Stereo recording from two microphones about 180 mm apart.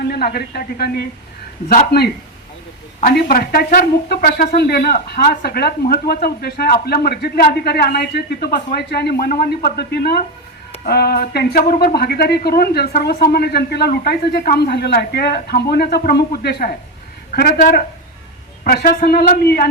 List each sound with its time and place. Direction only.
0.1 s speech: 60° left (ahead or behind)
3.1 s speech: 55° left (ahead or behind)